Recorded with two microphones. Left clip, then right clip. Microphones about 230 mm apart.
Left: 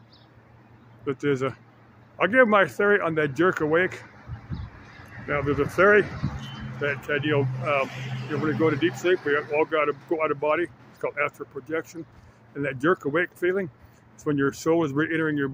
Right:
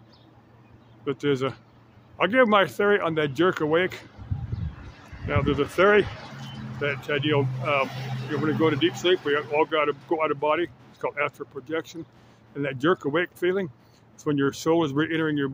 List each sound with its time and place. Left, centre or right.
1.2 s speech: centre
5.3 s speech: centre
7.9 s speech: right
9.0 s speech: centre